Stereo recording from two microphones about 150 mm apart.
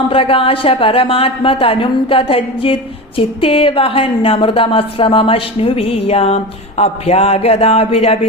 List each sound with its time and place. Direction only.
0.1 s a woman's voice: 40° left (ahead or behind)